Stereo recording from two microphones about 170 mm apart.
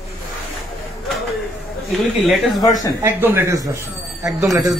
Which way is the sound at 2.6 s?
20° left (ahead or behind).